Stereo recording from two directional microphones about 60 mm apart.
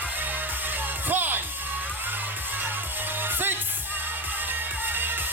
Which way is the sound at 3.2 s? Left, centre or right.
Right.